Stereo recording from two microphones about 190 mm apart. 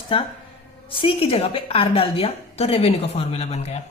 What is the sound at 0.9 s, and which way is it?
A woman's voice, 30° left (ahead or behind).